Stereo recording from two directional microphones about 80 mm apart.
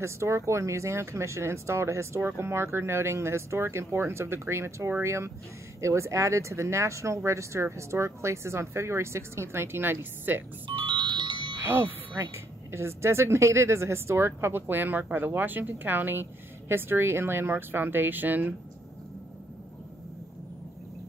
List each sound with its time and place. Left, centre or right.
0.0 s speech: right
10.8 s music: right
11.6 s speech: right